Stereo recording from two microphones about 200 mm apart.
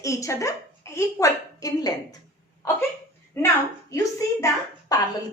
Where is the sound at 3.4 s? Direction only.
10° left (ahead or behind).